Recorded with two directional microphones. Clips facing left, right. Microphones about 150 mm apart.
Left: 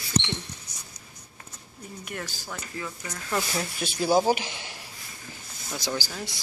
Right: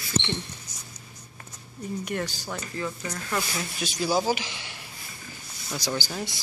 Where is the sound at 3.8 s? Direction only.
60° left (ahead or behind).